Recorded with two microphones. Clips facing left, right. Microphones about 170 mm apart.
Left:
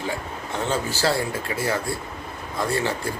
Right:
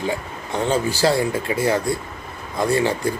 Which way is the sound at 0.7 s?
15° right (ahead or behind).